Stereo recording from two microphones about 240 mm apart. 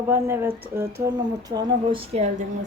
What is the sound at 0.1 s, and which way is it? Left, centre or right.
Speech, centre.